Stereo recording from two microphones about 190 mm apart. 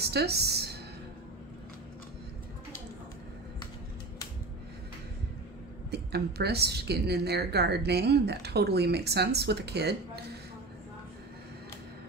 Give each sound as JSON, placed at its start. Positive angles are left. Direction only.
{"t": 0.0, "sound": "a woman's voice", "side_deg": -60}
{"t": 5.9, "sound": "a woman's voice", "side_deg": -60}